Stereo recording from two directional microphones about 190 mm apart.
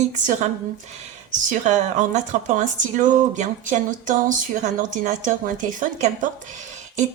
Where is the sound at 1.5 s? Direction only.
40° right (ahead or behind).